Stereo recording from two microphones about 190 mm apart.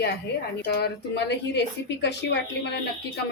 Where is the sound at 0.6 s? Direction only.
60° left (ahead or behind).